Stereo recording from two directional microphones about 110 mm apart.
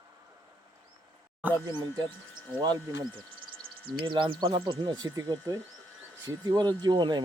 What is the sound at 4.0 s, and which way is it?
Speech, 50° right (ahead or behind).